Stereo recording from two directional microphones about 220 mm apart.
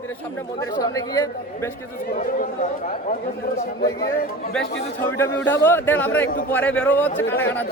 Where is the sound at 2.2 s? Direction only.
35° left (ahead or behind).